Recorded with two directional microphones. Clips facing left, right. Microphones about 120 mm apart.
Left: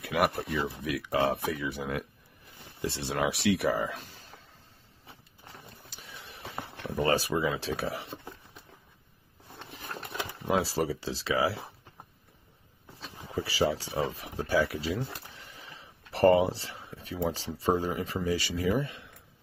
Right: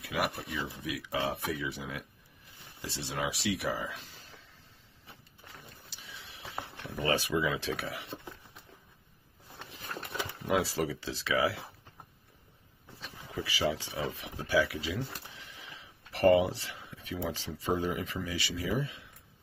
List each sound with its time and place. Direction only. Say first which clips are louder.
0.0 s speech: left 6 dB; 60° left (ahead or behind)
5.9 s printer: left 3 dB; 50° left (ahead or behind)
6.8 s speech: left 4 dB; 45° left (ahead or behind)
10.4 s speech: left 2 dB; 30° left (ahead or behind)
13.0 s speech: left 4 dB; 35° left (ahead or behind); by 19.0 s 55° left (ahead or behind)